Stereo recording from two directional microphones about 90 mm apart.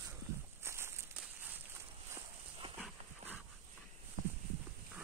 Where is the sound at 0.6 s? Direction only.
30° right (ahead or behind).